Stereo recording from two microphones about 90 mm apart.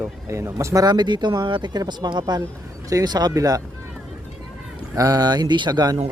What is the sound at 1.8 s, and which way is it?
Speech, 50° right (ahead or behind).